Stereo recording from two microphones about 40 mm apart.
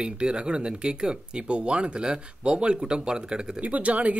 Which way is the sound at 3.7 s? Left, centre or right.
Right.